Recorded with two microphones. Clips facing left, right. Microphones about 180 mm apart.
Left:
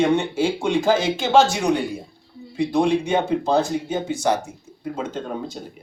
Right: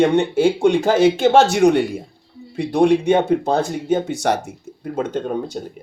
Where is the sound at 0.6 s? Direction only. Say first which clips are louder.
Right 5 dB; 60° right (ahead or behind).